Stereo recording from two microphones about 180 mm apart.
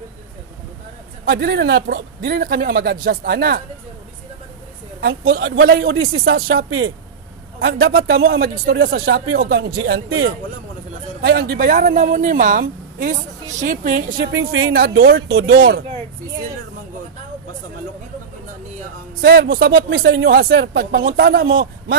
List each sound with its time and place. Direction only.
1.2 s a man's voice: 70° right (ahead or behind)
5.0 s a man's voice: 60° right (ahead or behind)
14.2 s a man's voice: 70° right (ahead or behind)
19.2 s a man's voice: 55° right (ahead or behind)